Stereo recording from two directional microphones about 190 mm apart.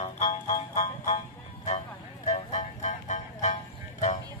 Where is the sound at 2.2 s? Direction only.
35° left (ahead or behind).